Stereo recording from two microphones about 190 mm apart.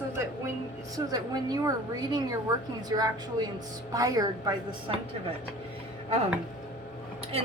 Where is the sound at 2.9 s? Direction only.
20° right (ahead or behind).